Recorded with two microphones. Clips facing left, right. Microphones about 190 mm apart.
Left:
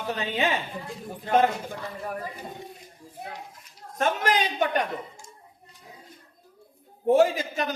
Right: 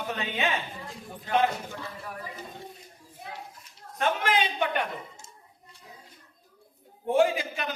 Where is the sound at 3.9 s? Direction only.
45° left (ahead or behind).